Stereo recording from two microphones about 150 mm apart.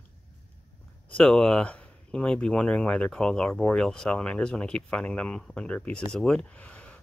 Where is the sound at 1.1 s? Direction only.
5° left (ahead or behind).